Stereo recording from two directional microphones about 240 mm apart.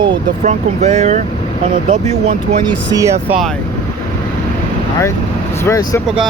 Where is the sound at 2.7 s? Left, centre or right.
Centre.